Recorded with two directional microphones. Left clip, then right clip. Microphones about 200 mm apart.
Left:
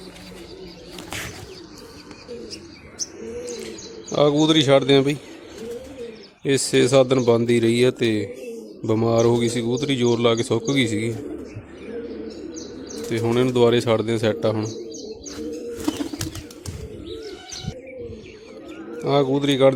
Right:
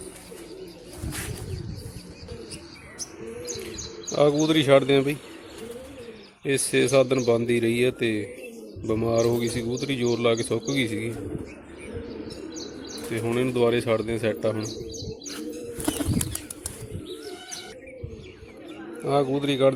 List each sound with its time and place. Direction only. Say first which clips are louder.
4.1 s speech: left 3 dB; 25° left (ahead or behind)
6.4 s speech: left 4 dB; 25° left (ahead or behind)
13.1 s speech: left 5 dB; 25° left (ahead or behind)
19.0 s speech: left 4 dB; 25° left (ahead or behind)